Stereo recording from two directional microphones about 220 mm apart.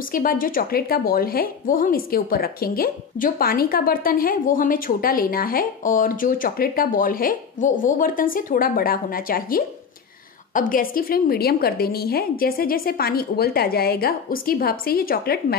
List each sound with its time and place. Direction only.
0.1 s a woman's voice: 40° left (ahead or behind)